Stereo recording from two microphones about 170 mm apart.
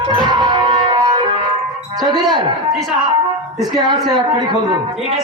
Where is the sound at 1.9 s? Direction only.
25° right (ahead or behind).